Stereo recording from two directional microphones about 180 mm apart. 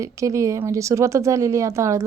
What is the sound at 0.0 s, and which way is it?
Speech, 15° right (ahead or behind).